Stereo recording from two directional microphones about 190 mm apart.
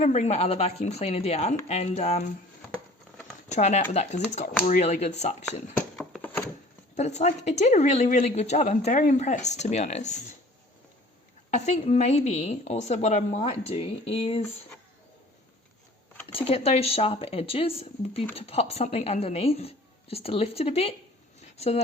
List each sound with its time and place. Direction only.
0.0 s speech: 35° left (ahead or behind)
3.5 s speech: 35° left (ahead or behind)
5.7 s a sound: 5° left (ahead or behind)
6.9 s speech: 35° left (ahead or behind)
11.5 s speech: 35° left (ahead or behind)
16.2 s speech: 30° left (ahead or behind)